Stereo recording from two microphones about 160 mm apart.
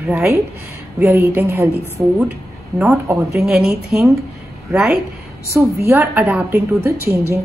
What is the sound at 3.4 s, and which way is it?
A woman's voice, 5° right (ahead or behind).